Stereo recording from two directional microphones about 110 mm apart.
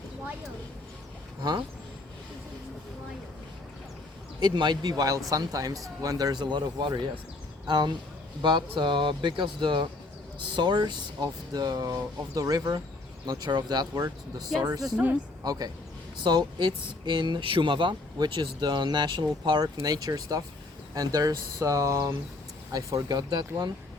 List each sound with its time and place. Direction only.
1.4 s speech: 40° right (ahead or behind)
4.4 s speech: 40° right (ahead or behind)
14.9 s speech: 15° right (ahead or behind)
15.4 s speech: 35° right (ahead or behind)